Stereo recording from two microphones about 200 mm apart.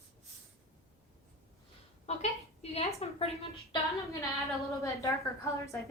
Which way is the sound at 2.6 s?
30° left (ahead or behind).